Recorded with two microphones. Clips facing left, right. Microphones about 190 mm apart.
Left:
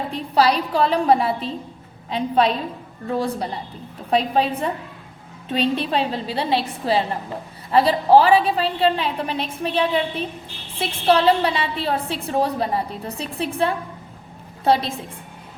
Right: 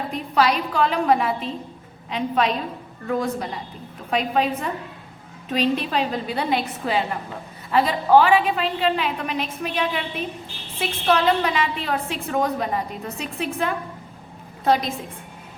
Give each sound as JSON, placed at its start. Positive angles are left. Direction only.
{"t": 0.1, "sound": "a woman's voice", "side_deg": 35}